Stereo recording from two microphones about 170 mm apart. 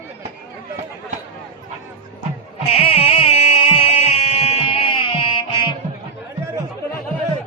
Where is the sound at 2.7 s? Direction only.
35° left (ahead or behind).